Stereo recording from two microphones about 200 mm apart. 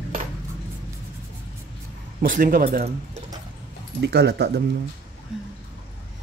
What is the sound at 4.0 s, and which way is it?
Speech, 60° right (ahead or behind).